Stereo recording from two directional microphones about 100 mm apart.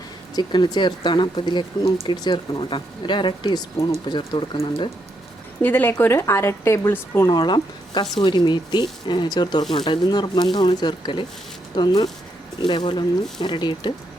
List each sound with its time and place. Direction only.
0.3 s speech: 45° left (ahead or behind)
5.6 s speech: 20° left (ahead or behind)
7.3 s speech: 45° left (ahead or behind)